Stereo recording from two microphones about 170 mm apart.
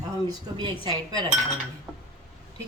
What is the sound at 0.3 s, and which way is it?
Speech, 25° right (ahead or behind).